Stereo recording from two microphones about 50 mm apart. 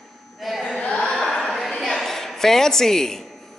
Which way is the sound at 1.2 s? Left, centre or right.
Centre.